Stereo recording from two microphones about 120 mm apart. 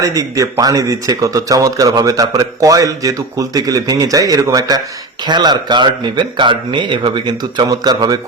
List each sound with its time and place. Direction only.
0.0 s speech: 30° right (ahead or behind)